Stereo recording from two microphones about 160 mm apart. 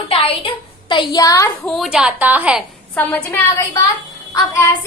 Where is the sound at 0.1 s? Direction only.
35° left (ahead or behind).